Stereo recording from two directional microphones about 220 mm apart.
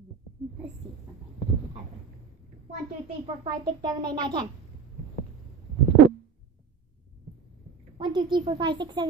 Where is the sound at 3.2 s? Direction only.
20° right (ahead or behind).